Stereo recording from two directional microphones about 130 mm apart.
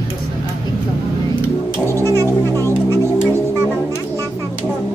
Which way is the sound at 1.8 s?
20° left (ahead or behind).